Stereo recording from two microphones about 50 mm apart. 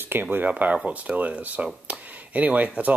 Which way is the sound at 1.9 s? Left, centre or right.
Right.